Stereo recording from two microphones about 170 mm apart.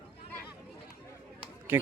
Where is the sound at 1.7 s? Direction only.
10° right (ahead or behind).